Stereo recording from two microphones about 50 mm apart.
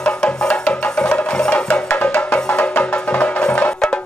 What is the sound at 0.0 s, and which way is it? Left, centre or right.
Music, centre.